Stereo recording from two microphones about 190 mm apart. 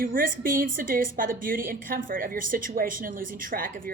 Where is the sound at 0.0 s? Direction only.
45° right (ahead or behind).